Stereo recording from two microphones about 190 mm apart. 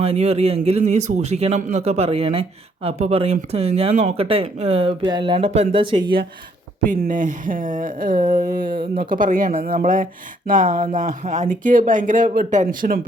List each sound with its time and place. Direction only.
0.0 s a man's voice: 30° right (ahead or behind)
6.8 s speech: 45° right (ahead or behind)